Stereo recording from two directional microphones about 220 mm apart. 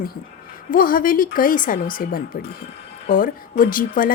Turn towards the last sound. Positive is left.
turn(degrees=40)  # may be behind; listen again after turning